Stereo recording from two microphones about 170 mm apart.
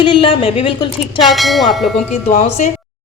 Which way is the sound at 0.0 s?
30° left (ahead or behind).